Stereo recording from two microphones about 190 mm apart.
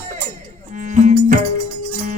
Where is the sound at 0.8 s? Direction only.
40° right (ahead or behind).